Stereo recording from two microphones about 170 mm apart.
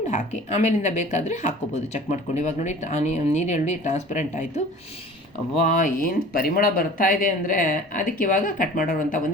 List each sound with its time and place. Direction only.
0.1 s speech: 45° left (ahead or behind)
5.6 s speech: 45° left (ahead or behind)